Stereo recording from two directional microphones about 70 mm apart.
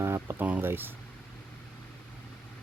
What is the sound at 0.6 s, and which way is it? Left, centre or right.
Speech, right.